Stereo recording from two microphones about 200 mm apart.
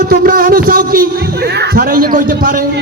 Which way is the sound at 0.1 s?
45° right (ahead or behind).